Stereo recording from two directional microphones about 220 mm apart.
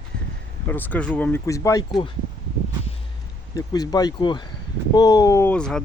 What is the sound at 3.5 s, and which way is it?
Speech, 15° left (ahead or behind).